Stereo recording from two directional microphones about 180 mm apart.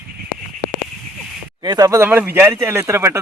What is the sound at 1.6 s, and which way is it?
Speech, 20° right (ahead or behind).